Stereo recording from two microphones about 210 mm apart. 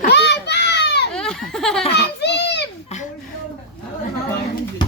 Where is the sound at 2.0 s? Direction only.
55° left (ahead or behind).